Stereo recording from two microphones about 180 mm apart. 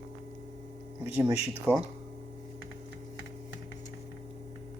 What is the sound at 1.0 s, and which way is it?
Speech, 10° right (ahead or behind).